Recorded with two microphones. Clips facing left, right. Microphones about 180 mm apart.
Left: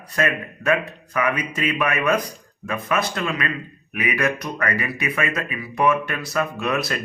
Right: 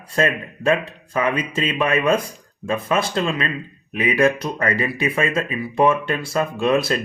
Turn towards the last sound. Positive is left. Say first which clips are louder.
# right 6 dB
turn(degrees=-30)  # may be behind; listen again after turning